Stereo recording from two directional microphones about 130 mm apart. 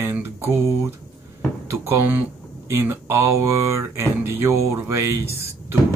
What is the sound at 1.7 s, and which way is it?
Speech, 20° right (ahead or behind).